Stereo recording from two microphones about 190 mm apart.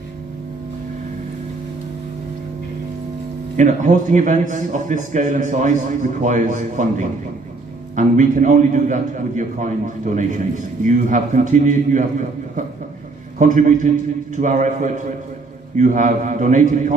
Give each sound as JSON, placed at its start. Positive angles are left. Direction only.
{"t": 3.6, "sound": "a man's voice", "side_deg": -40}
{"t": 13.4, "sound": "a man's voice", "side_deg": -40}